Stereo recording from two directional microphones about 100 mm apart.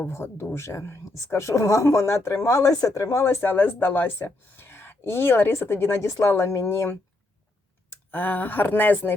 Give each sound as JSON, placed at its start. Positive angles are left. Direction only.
{"t": 0.0, "sound": "a woman's voice", "side_deg": 25}